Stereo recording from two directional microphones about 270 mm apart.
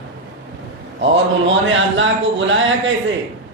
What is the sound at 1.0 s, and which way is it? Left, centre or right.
Speech, right.